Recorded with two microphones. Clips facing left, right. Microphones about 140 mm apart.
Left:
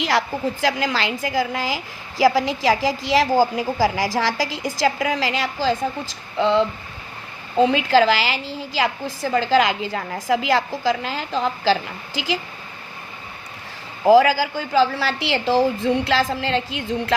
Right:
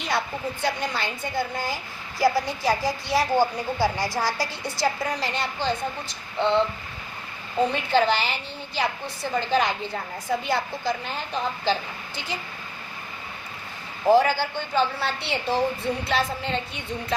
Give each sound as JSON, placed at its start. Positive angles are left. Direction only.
{"t": 0.0, "sound": "a woman's voice", "side_deg": 90}
{"t": 7.6, "sound": "a woman's voice", "side_deg": 90}
{"t": 14.1, "sound": "a woman's voice", "side_deg": 90}